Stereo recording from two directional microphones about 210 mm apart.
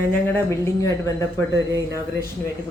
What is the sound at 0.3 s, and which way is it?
Speech, 15° left (ahead or behind).